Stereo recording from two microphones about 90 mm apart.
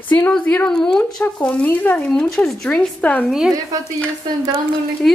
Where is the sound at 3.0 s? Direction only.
15° left (ahead or behind).